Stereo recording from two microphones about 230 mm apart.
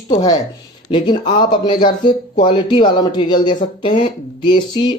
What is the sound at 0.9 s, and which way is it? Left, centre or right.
Speech, centre.